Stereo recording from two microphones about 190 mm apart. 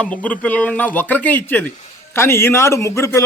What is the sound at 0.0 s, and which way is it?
A man's voice, 10° left (ahead or behind).